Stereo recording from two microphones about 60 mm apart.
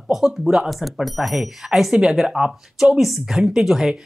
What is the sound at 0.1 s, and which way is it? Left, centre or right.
Speech, centre.